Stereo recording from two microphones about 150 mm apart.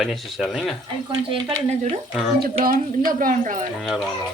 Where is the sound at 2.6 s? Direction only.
70° right (ahead or behind).